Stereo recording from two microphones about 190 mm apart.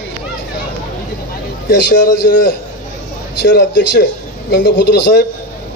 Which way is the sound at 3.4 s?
65° left (ahead or behind).